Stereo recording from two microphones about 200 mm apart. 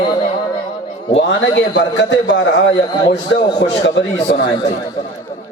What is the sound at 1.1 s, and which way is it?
A man's voice, 65° left (ahead or behind).